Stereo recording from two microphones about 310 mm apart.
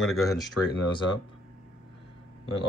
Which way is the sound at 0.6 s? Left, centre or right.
Left.